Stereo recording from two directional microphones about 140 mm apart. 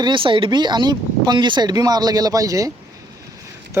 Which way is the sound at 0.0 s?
35° right (ahead or behind).